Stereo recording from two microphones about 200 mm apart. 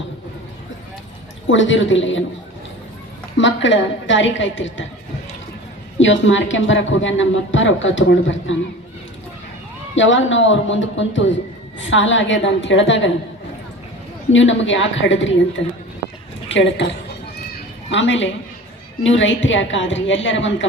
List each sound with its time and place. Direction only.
1.5 s speech: 70° left (ahead or behind)
3.3 s speech: 65° left (ahead or behind)
6.0 s speech: 70° left (ahead or behind)
9.9 s speech: 70° left (ahead or behind)
14.3 s a woman's voice: 70° left (ahead or behind)
17.9 s speech: 65° left (ahead or behind)